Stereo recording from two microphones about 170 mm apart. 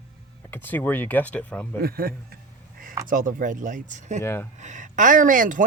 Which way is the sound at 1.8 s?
60° right (ahead or behind).